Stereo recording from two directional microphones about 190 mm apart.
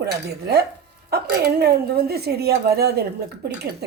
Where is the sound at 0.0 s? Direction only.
55° right (ahead or behind).